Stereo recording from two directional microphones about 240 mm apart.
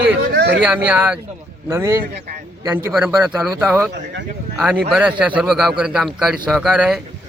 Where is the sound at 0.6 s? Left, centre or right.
Centre.